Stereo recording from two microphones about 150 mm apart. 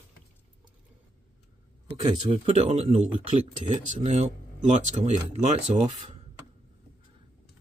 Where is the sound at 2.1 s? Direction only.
45° right (ahead or behind).